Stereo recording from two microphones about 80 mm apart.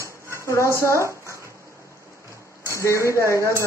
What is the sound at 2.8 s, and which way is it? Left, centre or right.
Speech, left.